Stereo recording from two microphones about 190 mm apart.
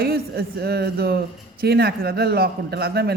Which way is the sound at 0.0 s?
55° right (ahead or behind).